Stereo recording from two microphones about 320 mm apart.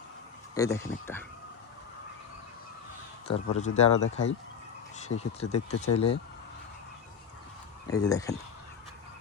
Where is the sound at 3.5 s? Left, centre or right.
Left.